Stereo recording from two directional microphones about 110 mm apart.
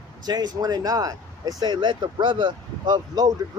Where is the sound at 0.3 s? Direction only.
40° right (ahead or behind).